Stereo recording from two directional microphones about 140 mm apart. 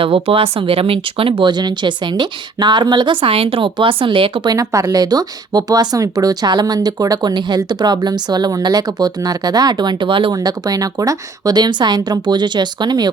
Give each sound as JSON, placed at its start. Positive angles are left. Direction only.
{"t": 0.0, "sound": "speech", "side_deg": -40}